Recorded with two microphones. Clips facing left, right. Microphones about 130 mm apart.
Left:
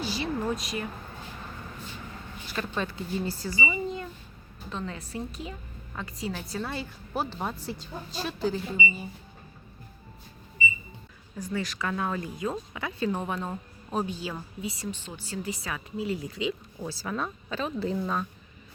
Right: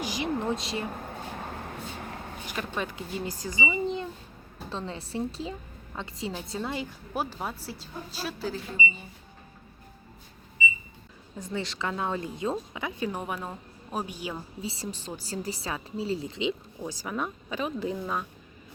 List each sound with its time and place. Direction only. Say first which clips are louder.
0.0 s a sound: even; 15° right (ahead or behind)
1.1 s vehicle: right 5 dB; 55° right (ahead or behind)
2.7 s a woman's voice: left 3 dB; 15° right (ahead or behind); by 9.0 s 5° left (ahead or behind)
11.3 s a woman's voice: left 1 dB; 25° right (ahead or behind)
14.6 s a woman's voice: left 3 dB; 30° right (ahead or behind); by 18.3 s 10° right (ahead or behind)